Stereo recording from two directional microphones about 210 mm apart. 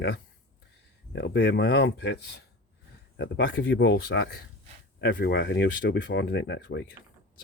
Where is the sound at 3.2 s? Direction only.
65° left (ahead or behind).